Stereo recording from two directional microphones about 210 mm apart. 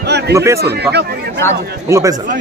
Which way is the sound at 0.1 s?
50° right (ahead or behind).